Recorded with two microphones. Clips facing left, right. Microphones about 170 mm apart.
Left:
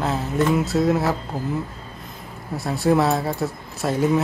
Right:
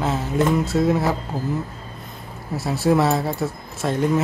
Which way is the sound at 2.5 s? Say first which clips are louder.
Even; centre (ahead or behind).